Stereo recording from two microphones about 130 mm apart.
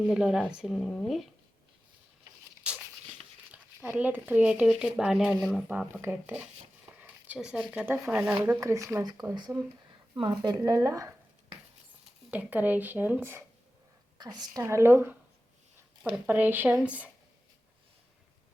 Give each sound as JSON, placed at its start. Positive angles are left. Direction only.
{"t": 0.1, "sound": "speech", "side_deg": -5}
{"t": 3.5, "sound": "speech", "side_deg": -15}
{"t": 5.6, "sound": "speech", "side_deg": -10}
{"t": 8.4, "sound": "speech", "side_deg": -25}
{"t": 12.3, "sound": "speech", "side_deg": -10}
{"t": 14.2, "sound": "a woman's voice", "side_deg": -30}
{"t": 14.6, "sound": "speech", "side_deg": -20}